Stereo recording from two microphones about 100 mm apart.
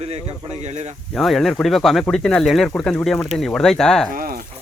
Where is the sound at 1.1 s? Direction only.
5° left (ahead or behind).